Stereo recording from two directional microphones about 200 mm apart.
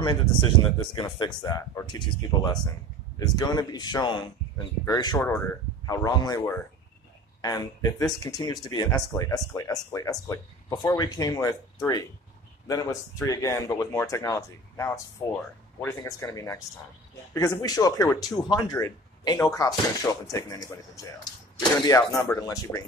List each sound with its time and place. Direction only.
0.9 s speech: 25° left (ahead or behind)